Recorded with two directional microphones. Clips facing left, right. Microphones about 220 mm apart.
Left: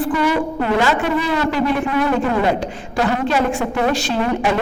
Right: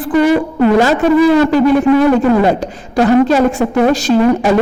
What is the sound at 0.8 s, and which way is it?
A woman's voice, 40° right (ahead or behind).